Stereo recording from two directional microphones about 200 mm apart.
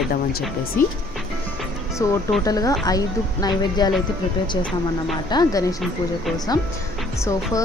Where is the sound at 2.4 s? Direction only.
15° left (ahead or behind).